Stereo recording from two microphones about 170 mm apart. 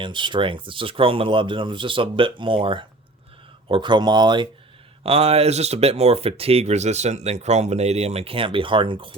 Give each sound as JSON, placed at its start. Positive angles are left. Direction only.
{"t": 0.0, "sound": "speech", "side_deg": -30}
{"t": 5.0, "sound": "speech", "side_deg": -35}